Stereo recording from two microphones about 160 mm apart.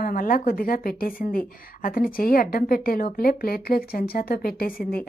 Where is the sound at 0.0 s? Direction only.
60° left (ahead or behind).